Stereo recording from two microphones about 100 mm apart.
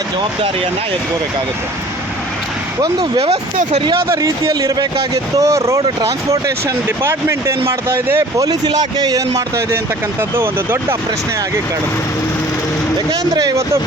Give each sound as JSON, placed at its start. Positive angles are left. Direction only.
{"t": 4.1, "sound": "speech", "side_deg": -35}
{"t": 8.4, "sound": "speech", "side_deg": -45}
{"t": 13.1, "sound": "speech", "side_deg": -35}